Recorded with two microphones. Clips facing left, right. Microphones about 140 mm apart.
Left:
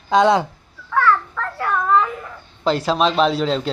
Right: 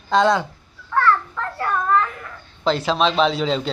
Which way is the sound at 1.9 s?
20° left (ahead or behind).